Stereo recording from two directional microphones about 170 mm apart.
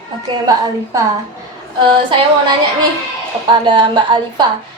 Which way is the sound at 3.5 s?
30° right (ahead or behind).